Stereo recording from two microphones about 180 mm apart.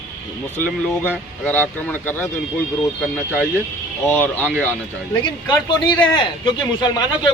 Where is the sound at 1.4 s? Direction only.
10° left (ahead or behind).